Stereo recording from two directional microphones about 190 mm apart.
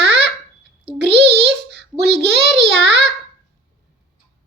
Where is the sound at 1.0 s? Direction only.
60° right (ahead or behind).